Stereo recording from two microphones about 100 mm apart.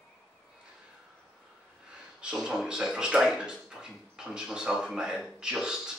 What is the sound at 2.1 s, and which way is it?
Speech, 5° right (ahead or behind).